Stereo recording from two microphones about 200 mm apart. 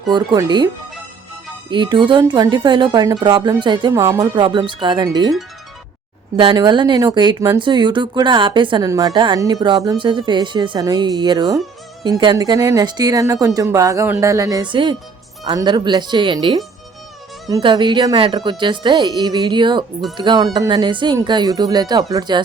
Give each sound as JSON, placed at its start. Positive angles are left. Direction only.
{"t": 0.1, "sound": "speech", "side_deg": -20}
{"t": 1.7, "sound": "speech", "side_deg": -25}
{"t": 6.3, "sound": "speech", "side_deg": -25}